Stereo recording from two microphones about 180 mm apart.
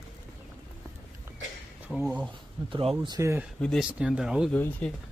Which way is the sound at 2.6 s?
30° right (ahead or behind).